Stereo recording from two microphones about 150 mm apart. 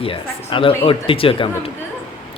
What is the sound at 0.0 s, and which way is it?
Speech, 35° left (ahead or behind).